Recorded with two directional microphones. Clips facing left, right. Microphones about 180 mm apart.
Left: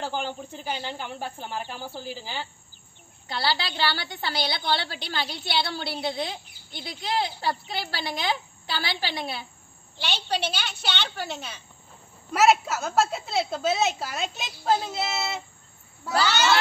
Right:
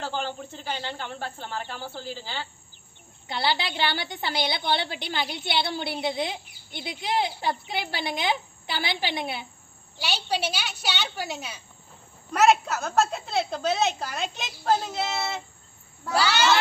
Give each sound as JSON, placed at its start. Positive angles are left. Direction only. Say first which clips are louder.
{"t": 0.0, "sound": "a woman's voice", "louder": "even", "side_deg": 15}
{"t": 3.3, "sound": "a woman's voice", "louder": "right 1 dB", "side_deg": -20}
{"t": 12.3, "sound": "a woman's voice", "louder": "even", "side_deg": 5}
{"t": 16.2, "sound": "a woman's voice", "louder": "even", "side_deg": -10}